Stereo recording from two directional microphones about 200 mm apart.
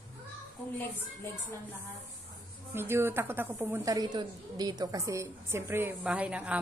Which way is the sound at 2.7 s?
10° right (ahead or behind).